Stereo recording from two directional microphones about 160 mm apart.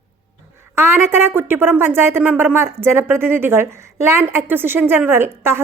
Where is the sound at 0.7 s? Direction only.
15° right (ahead or behind).